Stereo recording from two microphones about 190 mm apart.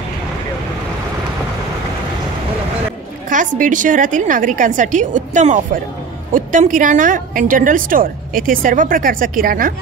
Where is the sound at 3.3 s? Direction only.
45° right (ahead or behind).